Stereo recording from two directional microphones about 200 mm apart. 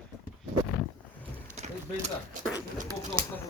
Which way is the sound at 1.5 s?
35° right (ahead or behind).